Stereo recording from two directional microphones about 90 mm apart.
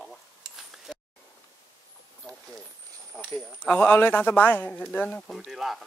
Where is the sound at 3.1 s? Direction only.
25° left (ahead or behind).